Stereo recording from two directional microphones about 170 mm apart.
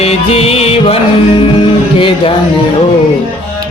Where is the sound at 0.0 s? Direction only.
35° left (ahead or behind).